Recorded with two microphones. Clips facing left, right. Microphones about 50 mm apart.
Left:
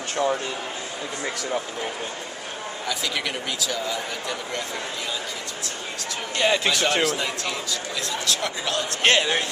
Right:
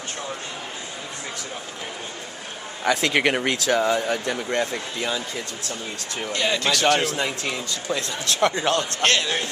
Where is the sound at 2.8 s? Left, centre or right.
Right.